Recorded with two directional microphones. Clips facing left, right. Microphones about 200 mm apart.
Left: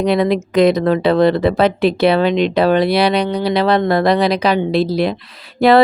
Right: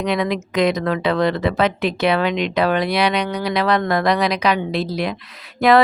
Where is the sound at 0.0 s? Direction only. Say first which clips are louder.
Left 6 dB; 35° left (ahead or behind).